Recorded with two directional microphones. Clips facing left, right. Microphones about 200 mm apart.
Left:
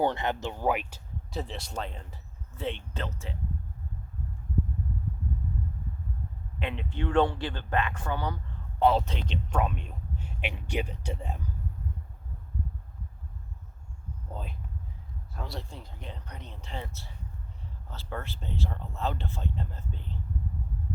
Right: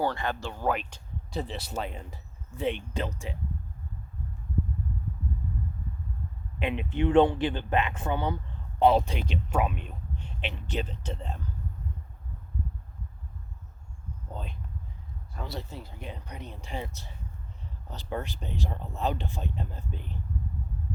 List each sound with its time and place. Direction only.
0.0 s speech: 20° left (ahead or behind); by 3.3 s 15° right (ahead or behind)
6.6 s speech: 15° right (ahead or behind)
10.2 s a man's voice: 10° left (ahead or behind)
14.3 s speech: 5° left (ahead or behind); by 20.1 s 15° right (ahead or behind)